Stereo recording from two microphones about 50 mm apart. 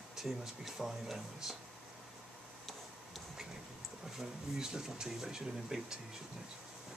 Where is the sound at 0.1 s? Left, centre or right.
Centre.